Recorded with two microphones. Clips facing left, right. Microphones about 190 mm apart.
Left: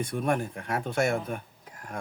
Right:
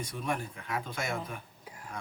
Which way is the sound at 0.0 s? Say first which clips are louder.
Left 7 dB; 55° left (ahead or behind).